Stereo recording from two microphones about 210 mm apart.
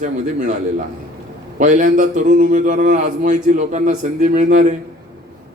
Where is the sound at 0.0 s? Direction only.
35° right (ahead or behind).